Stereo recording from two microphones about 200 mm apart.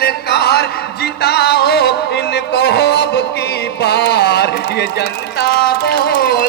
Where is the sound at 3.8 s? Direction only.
55° left (ahead or behind).